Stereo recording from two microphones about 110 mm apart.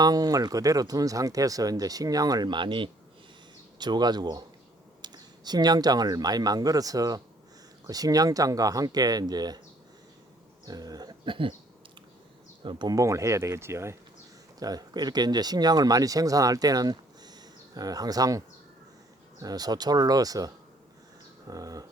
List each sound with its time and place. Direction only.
0.0 s speech: 35° right (ahead or behind)
10.7 s speech: 35° right (ahead or behind)
12.6 s speech: 40° right (ahead or behind)
14.6 s speech: 35° right (ahead or behind)
21.5 s speech: 35° right (ahead or behind)